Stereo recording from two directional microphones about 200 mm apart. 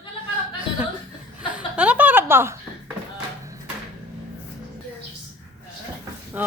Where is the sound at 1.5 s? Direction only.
5° right (ahead or behind).